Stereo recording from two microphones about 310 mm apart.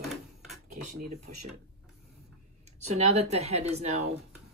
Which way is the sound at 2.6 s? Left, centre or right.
Right.